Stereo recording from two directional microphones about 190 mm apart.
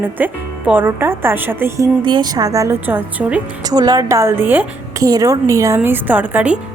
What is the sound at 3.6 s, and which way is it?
A woman's voice, 20° right (ahead or behind).